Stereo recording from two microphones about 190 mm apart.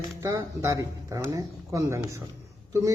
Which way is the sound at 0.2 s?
15° right (ahead or behind).